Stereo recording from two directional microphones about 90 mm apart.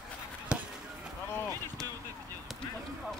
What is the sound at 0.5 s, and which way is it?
Chop, 15° right (ahead or behind).